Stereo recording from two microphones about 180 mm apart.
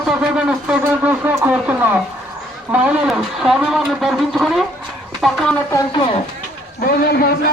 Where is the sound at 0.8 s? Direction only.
15° right (ahead or behind); by 5.6 s centre (ahead or behind).